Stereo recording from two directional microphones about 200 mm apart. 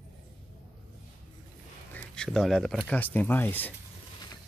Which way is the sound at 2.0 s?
5° left (ahead or behind).